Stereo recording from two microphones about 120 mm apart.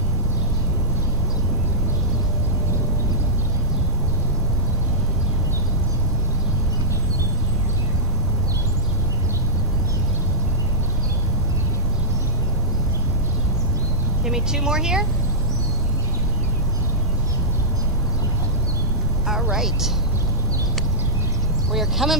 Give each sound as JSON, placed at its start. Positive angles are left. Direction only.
{"t": 14.2, "sound": "speech", "side_deg": -5}
{"t": 19.5, "sound": "speech", "side_deg": -5}
{"t": 21.7, "sound": "speech", "side_deg": 0}